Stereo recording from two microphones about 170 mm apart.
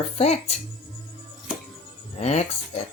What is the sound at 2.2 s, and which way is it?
Speech, 40° left (ahead or behind).